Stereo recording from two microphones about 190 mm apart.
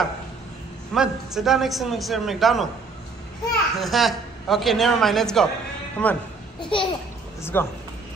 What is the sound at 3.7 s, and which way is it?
A woman's voice, centre (ahead or behind).